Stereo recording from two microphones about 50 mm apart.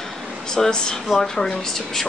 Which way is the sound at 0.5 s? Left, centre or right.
Centre.